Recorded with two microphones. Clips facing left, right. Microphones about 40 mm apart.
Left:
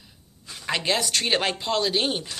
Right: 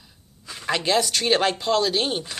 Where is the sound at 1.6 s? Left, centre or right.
Left.